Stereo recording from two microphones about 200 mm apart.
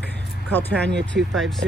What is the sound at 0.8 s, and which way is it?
Speech, 60° right (ahead or behind).